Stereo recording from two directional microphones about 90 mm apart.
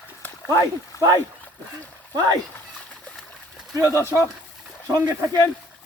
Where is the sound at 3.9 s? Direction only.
30° left (ahead or behind).